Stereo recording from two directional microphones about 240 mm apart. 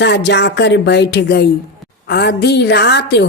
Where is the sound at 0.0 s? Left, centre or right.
Left.